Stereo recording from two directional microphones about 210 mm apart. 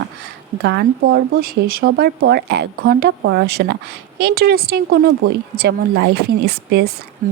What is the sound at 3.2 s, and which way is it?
Speech, 60° right (ahead or behind).